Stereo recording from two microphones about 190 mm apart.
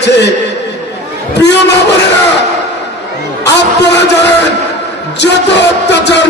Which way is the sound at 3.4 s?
65° left (ahead or behind).